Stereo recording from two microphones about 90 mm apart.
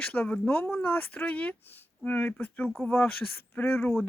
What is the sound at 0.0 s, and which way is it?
Speech, 15° left (ahead or behind).